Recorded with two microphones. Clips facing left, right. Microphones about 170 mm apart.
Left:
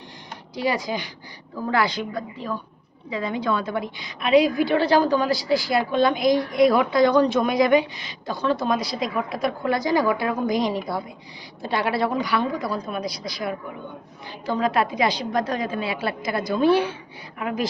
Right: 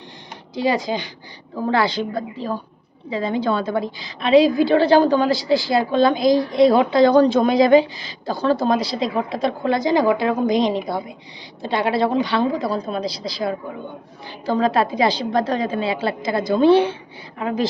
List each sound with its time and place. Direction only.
0.5 s a woman's voice: 25° right (ahead or behind)